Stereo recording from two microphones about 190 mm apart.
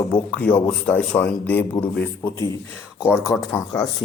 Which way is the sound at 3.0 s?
5° right (ahead or behind).